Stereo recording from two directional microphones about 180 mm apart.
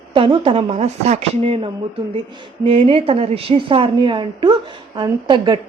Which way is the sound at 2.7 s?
30° right (ahead or behind).